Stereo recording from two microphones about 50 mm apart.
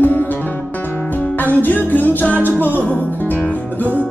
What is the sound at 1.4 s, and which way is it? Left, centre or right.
Music, left.